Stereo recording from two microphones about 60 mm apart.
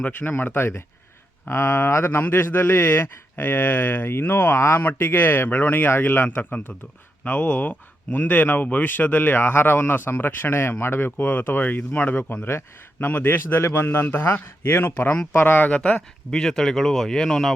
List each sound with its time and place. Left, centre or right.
0.0 s speech: left
14.8 s speech: left
16.3 s speech: centre